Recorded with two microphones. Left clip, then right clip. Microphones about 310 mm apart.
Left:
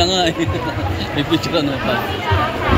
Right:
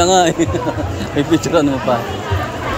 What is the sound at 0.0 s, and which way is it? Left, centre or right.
Speech, centre.